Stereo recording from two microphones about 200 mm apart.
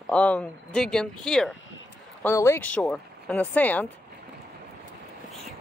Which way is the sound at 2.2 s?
15° left (ahead or behind).